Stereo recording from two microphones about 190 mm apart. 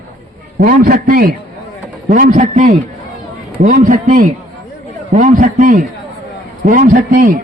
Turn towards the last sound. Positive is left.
turn(degrees=-45)  # may be behind; listen again after turning